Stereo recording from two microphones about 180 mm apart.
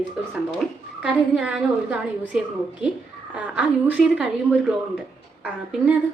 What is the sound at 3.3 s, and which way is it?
Speech, 5° right (ahead or behind).